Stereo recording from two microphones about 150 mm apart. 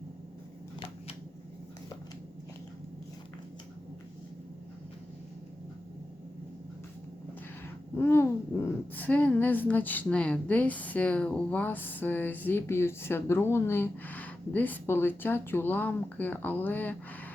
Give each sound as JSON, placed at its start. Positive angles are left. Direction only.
{"t": 7.9, "sound": "a woman's voice", "side_deg": 15}
{"t": 9.0, "sound": "a woman's voice", "side_deg": 10}